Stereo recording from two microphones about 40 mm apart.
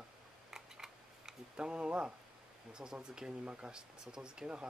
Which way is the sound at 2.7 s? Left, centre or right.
Centre.